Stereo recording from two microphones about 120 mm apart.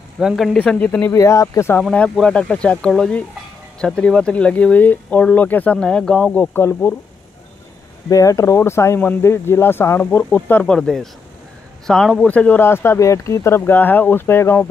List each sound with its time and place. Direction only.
0.2 s speech: 5° right (ahead or behind)
0.6 s speech: 10° left (ahead or behind)
1.1 s speech: 25° left (ahead or behind)
1.8 s speech: 5° left (ahead or behind)
8.1 s speech: 30° left (ahead or behind)